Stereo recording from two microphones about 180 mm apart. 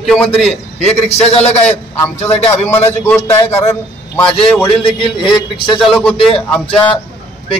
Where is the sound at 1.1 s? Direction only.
35° left (ahead or behind).